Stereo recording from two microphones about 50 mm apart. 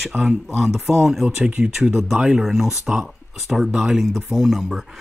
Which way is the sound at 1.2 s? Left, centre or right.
Centre.